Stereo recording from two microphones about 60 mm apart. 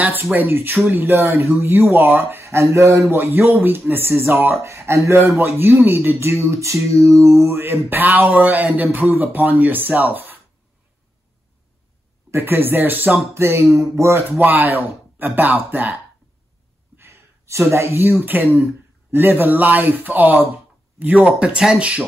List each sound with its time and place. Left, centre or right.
0.0 s speech: right
1.1 s speech: right
2.4 s speech: right
3.2 s speech: right
7.4 s speech: right
12.3 s speech: right
13.3 s speech: right
14.3 s speech: right
16.9 s a sound: right
18.0 s speech: right